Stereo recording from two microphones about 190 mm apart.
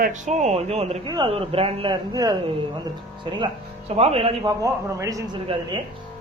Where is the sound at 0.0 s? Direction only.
40° right (ahead or behind); by 2.3 s 20° right (ahead or behind).